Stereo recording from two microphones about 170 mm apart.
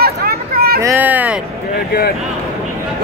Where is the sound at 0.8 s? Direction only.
10° right (ahead or behind).